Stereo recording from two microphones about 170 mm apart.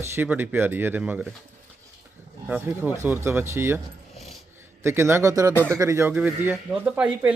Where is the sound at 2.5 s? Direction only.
10° right (ahead or behind).